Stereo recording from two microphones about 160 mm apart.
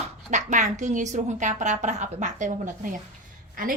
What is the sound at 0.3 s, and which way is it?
A woman's voice, 50° right (ahead or behind).